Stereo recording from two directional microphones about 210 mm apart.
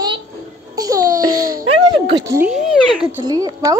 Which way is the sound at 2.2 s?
10° right (ahead or behind).